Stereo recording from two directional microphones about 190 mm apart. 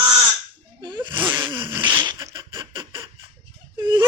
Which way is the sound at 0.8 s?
25° right (ahead or behind).